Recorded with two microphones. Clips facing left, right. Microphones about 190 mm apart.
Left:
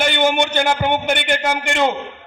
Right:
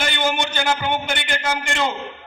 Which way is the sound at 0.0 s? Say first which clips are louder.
Left 6 dB; 60° left (ahead or behind).